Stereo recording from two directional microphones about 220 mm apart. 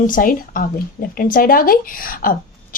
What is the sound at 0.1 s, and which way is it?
A woman's voice, 40° left (ahead or behind).